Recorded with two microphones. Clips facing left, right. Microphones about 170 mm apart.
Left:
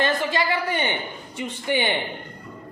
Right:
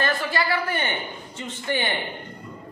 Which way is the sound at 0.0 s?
20° left (ahead or behind).